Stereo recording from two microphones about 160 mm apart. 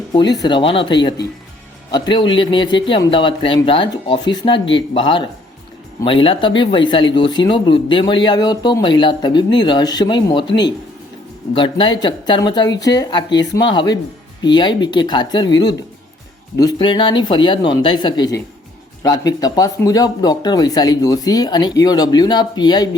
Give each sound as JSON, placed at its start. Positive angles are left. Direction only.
{"t": 0.1, "sound": "a man's voice", "side_deg": 25}